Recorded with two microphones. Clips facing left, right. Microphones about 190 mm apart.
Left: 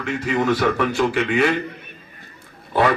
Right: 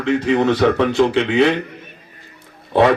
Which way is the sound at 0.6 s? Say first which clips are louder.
Right 5 dB; 20° right (ahead or behind).